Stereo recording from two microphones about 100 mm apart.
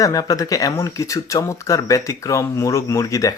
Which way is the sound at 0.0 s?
35° left (ahead or behind).